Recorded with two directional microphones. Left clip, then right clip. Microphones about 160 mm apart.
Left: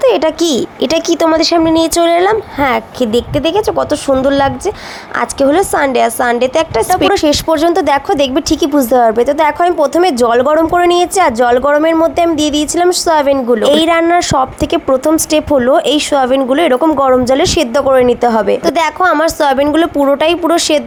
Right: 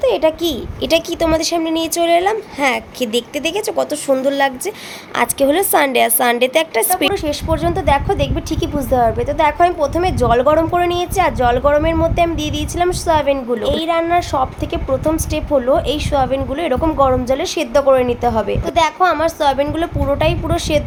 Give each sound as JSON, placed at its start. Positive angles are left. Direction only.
{"t": 0.0, "sound": "a woman's voice", "side_deg": 45}
{"t": 7.1, "sound": "a woman's voice", "side_deg": 45}